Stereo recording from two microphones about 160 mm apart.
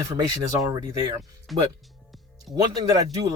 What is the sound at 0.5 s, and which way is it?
Speech, 20° right (ahead or behind).